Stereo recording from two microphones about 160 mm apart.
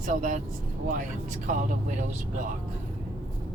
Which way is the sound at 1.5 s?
50° right (ahead or behind).